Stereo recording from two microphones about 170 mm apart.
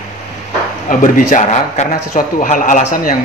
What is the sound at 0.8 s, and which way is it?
A man's voice, 50° left (ahead or behind).